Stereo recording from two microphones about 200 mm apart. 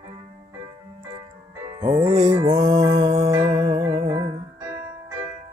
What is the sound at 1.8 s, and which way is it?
Music, 15° right (ahead or behind).